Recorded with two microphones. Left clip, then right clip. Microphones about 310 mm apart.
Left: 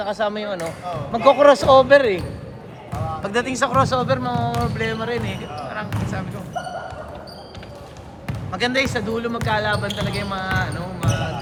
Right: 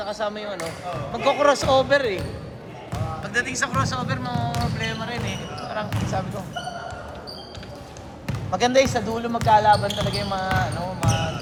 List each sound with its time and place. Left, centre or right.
0.0 s speech: left
3.2 s speech: centre
8.5 s speech: centre